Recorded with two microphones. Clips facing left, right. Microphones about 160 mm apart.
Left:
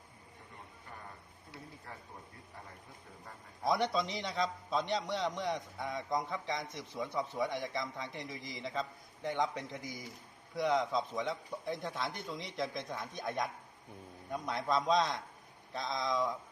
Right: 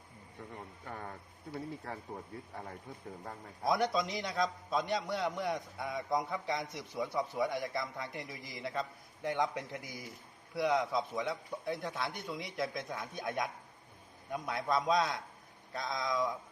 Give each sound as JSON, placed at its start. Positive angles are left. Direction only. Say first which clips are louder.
{"t": 0.9, "sound": "speech", "louder": "right 7 dB", "side_deg": -65}
{"t": 3.7, "sound": "a man's voice", "louder": "right 1 dB", "side_deg": 0}